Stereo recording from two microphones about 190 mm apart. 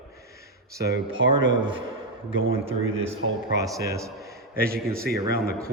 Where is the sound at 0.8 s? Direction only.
75° right (ahead or behind).